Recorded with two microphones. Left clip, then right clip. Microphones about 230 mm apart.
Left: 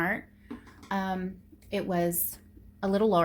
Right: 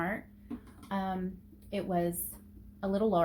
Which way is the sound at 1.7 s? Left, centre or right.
Left.